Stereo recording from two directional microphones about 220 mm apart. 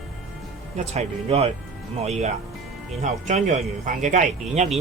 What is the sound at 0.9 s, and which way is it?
Speech, 30° right (ahead or behind).